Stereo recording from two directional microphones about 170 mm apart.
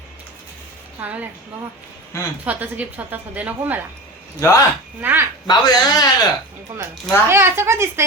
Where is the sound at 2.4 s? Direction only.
10° right (ahead or behind).